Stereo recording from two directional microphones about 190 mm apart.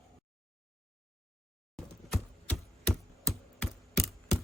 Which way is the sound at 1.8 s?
Centre (ahead or behind).